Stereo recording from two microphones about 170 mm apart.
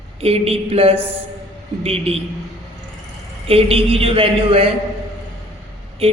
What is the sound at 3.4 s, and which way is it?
A woman's voice, 35° right (ahead or behind).